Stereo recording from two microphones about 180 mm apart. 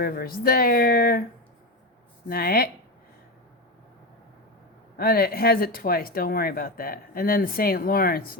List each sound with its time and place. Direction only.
0.0 s speech: 55° left (ahead or behind)
2.3 s speech: 55° left (ahead or behind)
4.9 s speech: 55° left (ahead or behind)